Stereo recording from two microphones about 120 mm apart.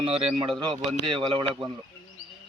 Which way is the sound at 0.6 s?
40° right (ahead or behind).